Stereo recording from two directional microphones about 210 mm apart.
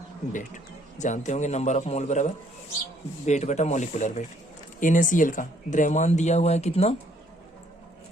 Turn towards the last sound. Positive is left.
turn(degrees=30)  # may be behind; listen again after turning